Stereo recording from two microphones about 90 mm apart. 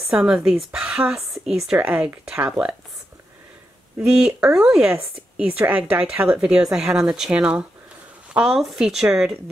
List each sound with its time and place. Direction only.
0.1 s speech: 10° right (ahead or behind)
1.8 s speech: 20° right (ahead or behind)
4.0 s speech: 5° right (ahead or behind)